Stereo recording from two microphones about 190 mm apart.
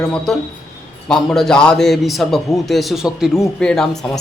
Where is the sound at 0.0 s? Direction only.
5° left (ahead or behind).